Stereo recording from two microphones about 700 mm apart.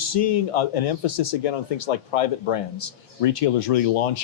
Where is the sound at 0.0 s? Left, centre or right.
Left.